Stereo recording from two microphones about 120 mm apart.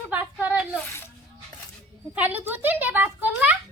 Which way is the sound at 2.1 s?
15° right (ahead or behind).